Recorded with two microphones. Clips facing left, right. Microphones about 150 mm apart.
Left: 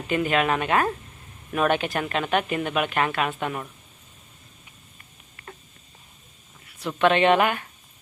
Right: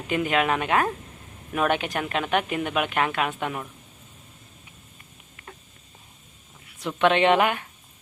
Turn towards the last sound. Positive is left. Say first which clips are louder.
# even
turn(degrees=-15)  # may be behind; listen again after turning